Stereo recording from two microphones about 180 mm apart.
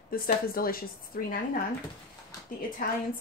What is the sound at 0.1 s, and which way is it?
A woman's voice, 55° left (ahead or behind).